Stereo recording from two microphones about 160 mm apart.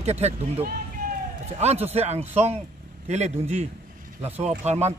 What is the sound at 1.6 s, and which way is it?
Speech, 40° right (ahead or behind).